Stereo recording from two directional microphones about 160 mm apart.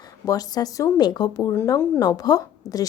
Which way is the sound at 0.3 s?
25° left (ahead or behind).